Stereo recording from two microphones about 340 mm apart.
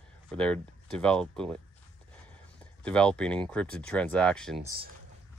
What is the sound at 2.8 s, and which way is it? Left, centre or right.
Speech, centre.